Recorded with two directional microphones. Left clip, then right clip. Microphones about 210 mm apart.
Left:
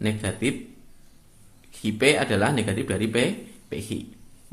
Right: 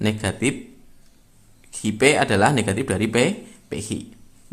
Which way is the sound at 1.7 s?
25° right (ahead or behind).